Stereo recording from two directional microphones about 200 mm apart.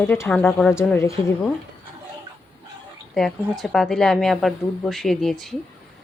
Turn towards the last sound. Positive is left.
turn(degrees=0)  # may be behind; listen again after turning